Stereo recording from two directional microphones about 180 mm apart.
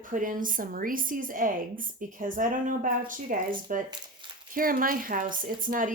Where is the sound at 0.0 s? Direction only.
45° right (ahead or behind).